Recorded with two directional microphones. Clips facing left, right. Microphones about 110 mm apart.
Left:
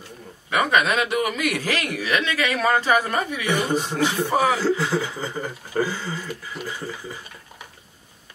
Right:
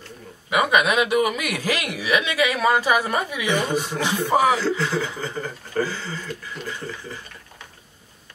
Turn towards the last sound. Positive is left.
turn(degrees=10)  # may be behind; listen again after turning